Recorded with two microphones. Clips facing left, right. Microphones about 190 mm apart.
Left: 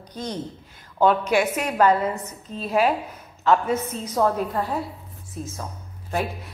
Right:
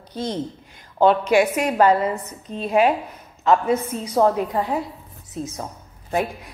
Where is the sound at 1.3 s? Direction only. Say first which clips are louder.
Right 4 dB; 10° right (ahead or behind).